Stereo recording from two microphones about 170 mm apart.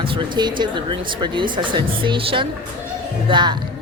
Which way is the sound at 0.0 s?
30° right (ahead or behind).